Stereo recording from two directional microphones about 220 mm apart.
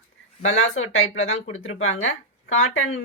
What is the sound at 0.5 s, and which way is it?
Speech, 65° left (ahead or behind).